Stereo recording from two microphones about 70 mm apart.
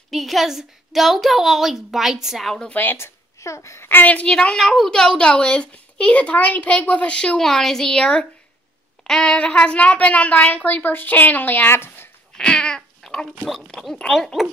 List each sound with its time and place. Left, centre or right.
0.1 s a woman's voice: centre
2.7 s a woman's voice: left
3.3 s speech: left
3.9 s a woman's voice: left
4.3 s a child's voice: centre
7.3 s a child's voice: centre; by 12.1 s left
12.4 s cat: centre
13.5 s a woman's voice: centre